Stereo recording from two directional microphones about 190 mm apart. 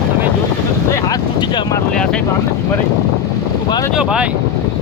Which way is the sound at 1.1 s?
25° left (ahead or behind).